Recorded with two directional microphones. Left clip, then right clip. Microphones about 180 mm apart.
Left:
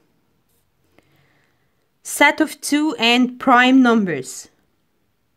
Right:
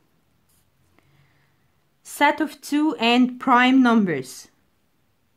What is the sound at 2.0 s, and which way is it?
Speech, 40° left (ahead or behind).